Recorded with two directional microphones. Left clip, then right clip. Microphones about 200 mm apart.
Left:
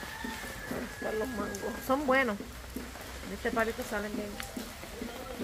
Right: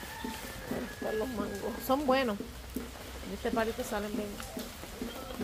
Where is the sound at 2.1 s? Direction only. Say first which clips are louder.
Left 2 dB; 10° right (ahead or behind).